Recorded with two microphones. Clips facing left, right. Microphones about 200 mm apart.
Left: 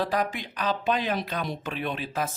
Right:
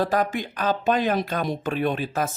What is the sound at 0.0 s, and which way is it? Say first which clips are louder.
Speech: right 4 dB; 45° right (ahead or behind).